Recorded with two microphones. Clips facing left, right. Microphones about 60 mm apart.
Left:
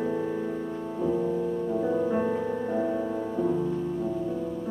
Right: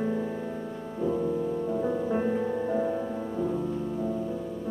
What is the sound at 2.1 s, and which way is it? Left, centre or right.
Music, centre.